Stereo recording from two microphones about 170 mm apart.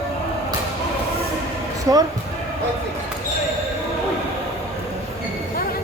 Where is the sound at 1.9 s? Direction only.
20° right (ahead or behind).